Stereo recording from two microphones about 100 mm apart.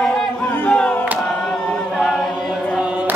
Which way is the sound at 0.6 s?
10° left (ahead or behind).